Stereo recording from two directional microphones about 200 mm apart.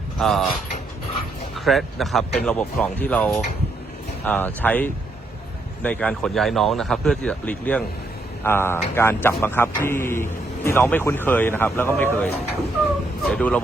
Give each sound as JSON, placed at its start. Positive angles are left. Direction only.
{"t": 0.2, "sound": "speech", "side_deg": 0}
{"t": 1.5, "sound": "speech", "side_deg": 0}